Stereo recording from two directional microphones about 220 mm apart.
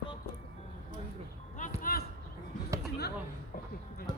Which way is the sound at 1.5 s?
35° left (ahead or behind).